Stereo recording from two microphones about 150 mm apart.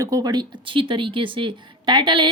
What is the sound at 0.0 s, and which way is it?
A woman's voice, 25° right (ahead or behind).